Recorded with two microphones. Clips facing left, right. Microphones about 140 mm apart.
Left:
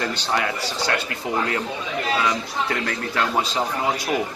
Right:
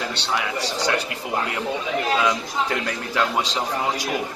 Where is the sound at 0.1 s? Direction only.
75° right (ahead or behind).